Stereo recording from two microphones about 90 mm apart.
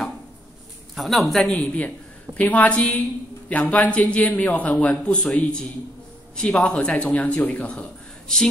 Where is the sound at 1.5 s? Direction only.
15° left (ahead or behind).